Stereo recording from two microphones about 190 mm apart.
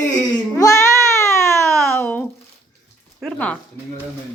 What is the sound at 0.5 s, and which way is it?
Speech, 15° left (ahead or behind).